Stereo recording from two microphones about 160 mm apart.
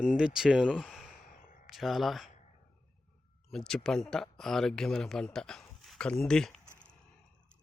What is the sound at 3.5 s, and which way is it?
Speech, 5° left (ahead or behind).